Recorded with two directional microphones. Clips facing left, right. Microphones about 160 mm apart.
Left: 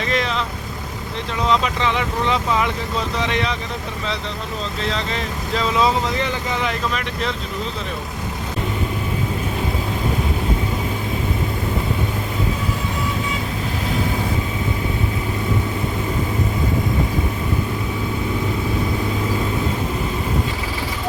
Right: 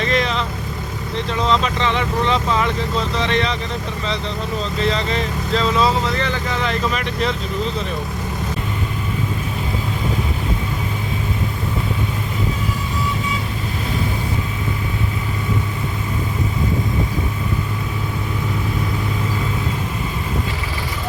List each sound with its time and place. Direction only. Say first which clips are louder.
0.0 s vehicle: right 2 dB; centre (ahead or behind)
1.4 s speech: even; 10° left (ahead or behind)
4.8 s speech: right 4 dB; centre (ahead or behind)